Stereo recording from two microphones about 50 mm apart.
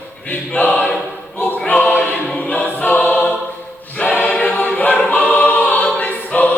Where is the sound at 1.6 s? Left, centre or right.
Left.